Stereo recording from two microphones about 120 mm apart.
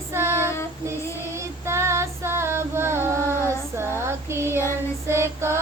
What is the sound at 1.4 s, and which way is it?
Female singing, 20° right (ahead or behind).